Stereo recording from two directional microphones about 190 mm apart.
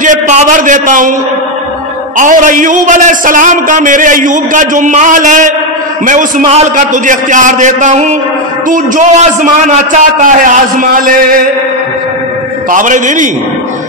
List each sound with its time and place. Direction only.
0.0 s a man's voice: 40° right (ahead or behind)
2.1 s a man's voice: 45° right (ahead or behind)
12.7 s a man's voice: 40° right (ahead or behind)